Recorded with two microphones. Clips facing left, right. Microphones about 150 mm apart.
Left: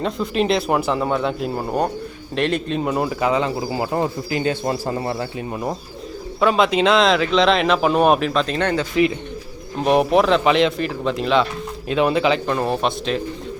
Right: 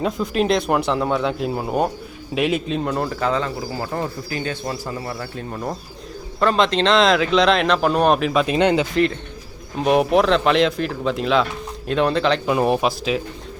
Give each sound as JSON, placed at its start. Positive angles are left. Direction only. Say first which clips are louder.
{"t": 0.0, "sound": "speech", "louder": "even", "side_deg": 0}
{"t": 4.6, "sound": "speech", "louder": "left 5 dB", "side_deg": 35}
{"t": 5.2, "sound": "speech", "louder": "left 3 dB", "side_deg": 15}
{"t": 8.3, "sound": "speech", "louder": "right 3 dB", "side_deg": -10}
{"t": 9.7, "sound": "speech", "louder": "even", "side_deg": 0}
{"t": 12.5, "sound": "speech", "louder": "right 2 dB", "side_deg": -15}